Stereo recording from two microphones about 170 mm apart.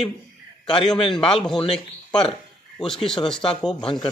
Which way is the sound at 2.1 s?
25° left (ahead or behind).